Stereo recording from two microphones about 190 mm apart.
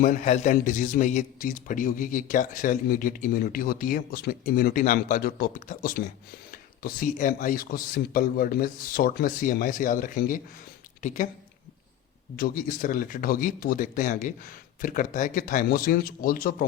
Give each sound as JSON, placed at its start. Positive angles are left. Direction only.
{"t": 0.0, "sound": "a man's voice", "side_deg": 40}
{"t": 12.4, "sound": "a man's voice", "side_deg": 45}